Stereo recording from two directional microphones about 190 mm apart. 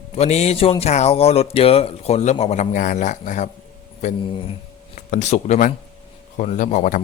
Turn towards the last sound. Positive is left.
turn(degrees=40)  # may be behind; listen again after turning